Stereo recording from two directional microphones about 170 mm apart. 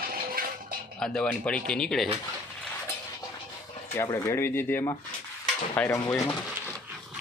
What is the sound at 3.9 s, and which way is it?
Speech, 15° left (ahead or behind).